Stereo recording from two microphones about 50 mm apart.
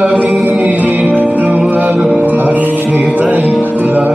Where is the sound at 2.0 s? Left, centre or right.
Right.